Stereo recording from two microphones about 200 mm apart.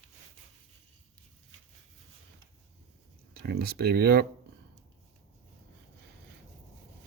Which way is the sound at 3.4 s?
55° right (ahead or behind).